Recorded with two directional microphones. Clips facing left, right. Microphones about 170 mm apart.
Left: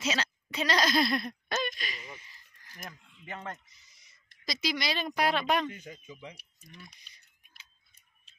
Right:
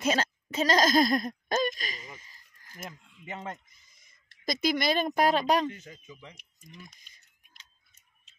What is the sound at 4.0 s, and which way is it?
Speech, 50° right (ahead or behind).